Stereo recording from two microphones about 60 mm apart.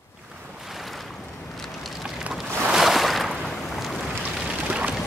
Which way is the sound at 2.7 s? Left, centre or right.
Centre.